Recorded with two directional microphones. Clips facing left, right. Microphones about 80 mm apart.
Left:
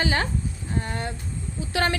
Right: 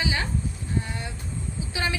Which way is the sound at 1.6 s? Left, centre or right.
Left.